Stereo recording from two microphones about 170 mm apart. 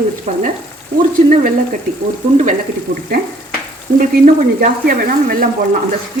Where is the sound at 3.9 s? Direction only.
55° right (ahead or behind).